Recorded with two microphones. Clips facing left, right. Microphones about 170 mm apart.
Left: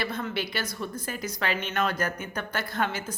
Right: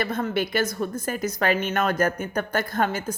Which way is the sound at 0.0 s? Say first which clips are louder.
Right 6 dB; 45° right (ahead or behind).